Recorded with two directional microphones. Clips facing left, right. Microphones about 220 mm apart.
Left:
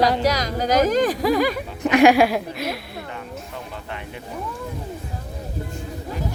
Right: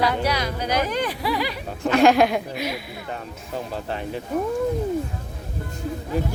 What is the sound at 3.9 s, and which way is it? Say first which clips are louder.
Speech: right 6 dB; 35° right (ahead or behind).